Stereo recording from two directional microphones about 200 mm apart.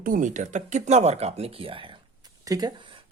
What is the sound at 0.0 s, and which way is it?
Speech, 40° right (ahead or behind).